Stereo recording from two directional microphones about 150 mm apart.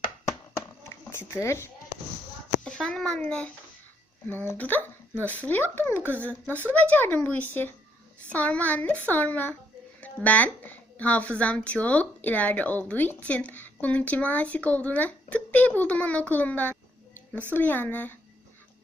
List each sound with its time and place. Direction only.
0.9 s speech: 20° left (ahead or behind)
2.6 s a child's voice: 5° left (ahead or behind)